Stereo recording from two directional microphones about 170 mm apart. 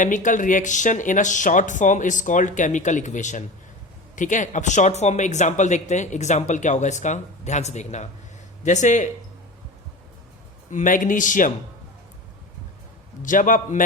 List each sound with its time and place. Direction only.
0.0 s speech: 50° left (ahead or behind)
10.7 s speech: 50° left (ahead or behind)
13.2 s speech: 50° left (ahead or behind)